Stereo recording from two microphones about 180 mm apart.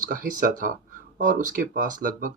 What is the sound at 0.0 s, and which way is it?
Speech, 50° right (ahead or behind).